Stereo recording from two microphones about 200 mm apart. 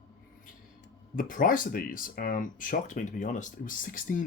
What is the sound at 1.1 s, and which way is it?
Speech, 45° left (ahead or behind).